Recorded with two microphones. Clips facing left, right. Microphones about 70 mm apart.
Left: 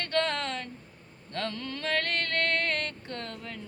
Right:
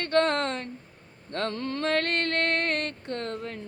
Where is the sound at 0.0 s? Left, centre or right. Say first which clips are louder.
Right 5 dB; right.